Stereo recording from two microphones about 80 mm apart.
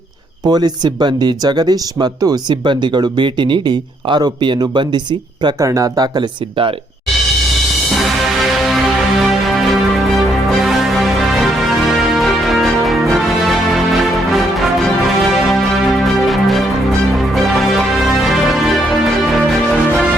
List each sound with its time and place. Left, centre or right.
0.4 s speech: right
5.5 s speech: right
7.9 s music: centre